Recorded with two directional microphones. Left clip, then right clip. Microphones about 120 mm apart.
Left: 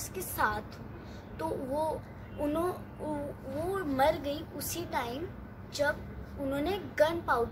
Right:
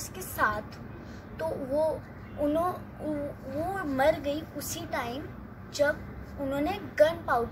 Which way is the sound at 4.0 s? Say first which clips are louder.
Right 3 dB; 20° left (ahead or behind).